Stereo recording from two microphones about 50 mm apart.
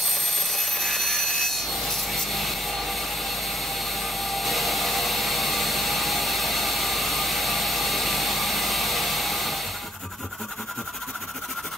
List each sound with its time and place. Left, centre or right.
0.5 s wood: centre
3.9 s jet engine: centre